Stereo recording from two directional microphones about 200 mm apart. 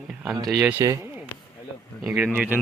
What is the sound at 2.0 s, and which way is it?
Speech, 5° right (ahead or behind).